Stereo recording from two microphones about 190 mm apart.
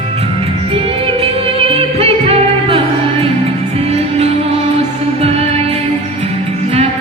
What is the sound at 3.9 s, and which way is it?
Music, 35° right (ahead or behind).